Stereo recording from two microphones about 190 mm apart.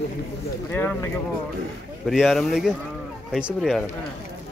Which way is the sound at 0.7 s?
10° left (ahead or behind).